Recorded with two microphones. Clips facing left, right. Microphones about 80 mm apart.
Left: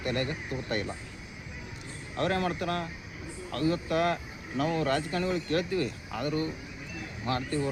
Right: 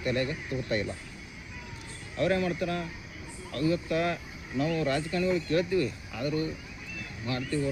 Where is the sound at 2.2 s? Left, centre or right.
Left.